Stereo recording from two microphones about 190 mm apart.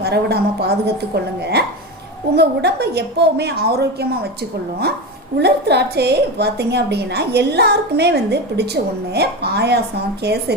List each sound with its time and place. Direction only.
0.0 s a woman's voice: 60° right (ahead or behind)